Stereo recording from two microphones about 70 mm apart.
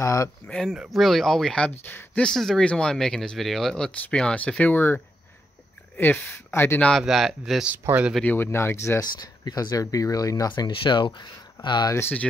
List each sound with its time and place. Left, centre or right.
0.0 s speech: left
0.5 s speech: centre
1.7 s speech: left
2.2 s speech: centre
4.7 s speech: left
7.0 s speech: centre
7.8 s speech: right
8.4 s speech: left
9.0 s speech: left
12.0 s speech: left